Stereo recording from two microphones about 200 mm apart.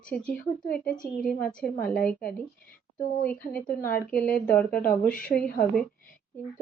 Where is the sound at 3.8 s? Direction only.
45° left (ahead or behind).